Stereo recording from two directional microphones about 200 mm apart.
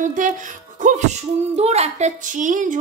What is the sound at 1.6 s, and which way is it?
A woman's voice, 35° right (ahead or behind).